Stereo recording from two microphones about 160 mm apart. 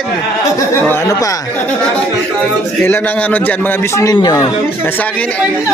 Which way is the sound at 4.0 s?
25° left (ahead or behind).